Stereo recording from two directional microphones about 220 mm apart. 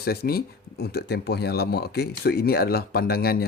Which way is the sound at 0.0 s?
45° left (ahead or behind).